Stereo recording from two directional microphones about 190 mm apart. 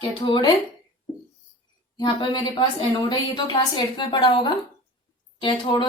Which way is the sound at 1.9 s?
25° left (ahead or behind).